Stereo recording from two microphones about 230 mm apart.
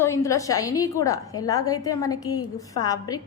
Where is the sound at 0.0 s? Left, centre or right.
Centre.